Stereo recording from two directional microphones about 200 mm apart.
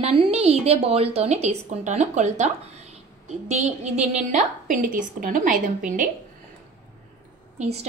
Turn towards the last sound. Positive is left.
turn(degrees=-35)  # may be behind; listen again after turning